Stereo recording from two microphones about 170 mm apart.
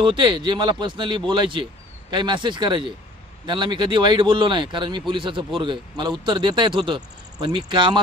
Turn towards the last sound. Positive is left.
turn(degrees=-30)  # may be behind; listen again after turning